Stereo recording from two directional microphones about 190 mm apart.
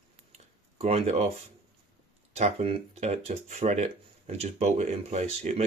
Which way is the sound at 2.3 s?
35° right (ahead or behind).